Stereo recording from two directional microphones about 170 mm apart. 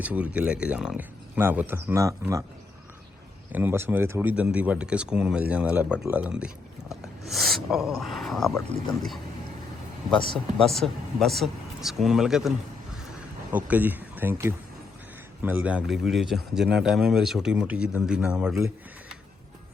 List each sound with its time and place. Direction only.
0.0 s speech: 10° right (ahead or behind)
3.5 s speech: 10° right (ahead or behind)
10.3 s speech: centre (ahead or behind)